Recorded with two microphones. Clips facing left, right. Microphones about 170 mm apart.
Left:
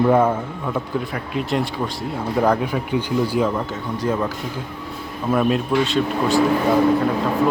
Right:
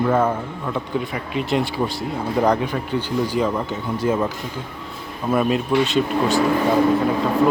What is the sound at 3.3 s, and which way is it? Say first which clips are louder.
Speech: left 1 dB; centre (ahead or behind).